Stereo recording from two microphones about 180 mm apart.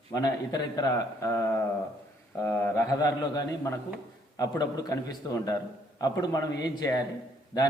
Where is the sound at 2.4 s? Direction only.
10° left (ahead or behind).